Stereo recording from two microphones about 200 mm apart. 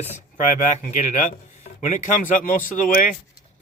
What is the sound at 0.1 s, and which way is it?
Speech, 35° left (ahead or behind).